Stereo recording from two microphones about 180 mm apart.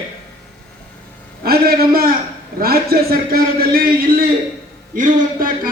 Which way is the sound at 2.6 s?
60° right (ahead or behind).